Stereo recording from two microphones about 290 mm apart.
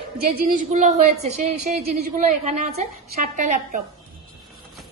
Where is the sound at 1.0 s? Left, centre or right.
Right.